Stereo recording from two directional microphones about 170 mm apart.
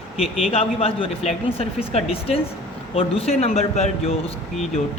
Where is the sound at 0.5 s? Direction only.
35° left (ahead or behind).